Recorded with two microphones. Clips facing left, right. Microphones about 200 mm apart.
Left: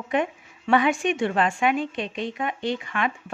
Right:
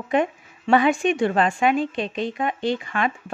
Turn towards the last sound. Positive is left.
turn(degrees=-35)  # may be behind; listen again after turning